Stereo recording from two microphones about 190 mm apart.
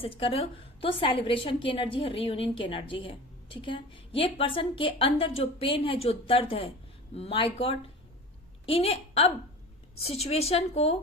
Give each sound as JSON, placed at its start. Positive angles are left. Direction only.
{"t": 0.0, "sound": "a woman's voice", "side_deg": 30}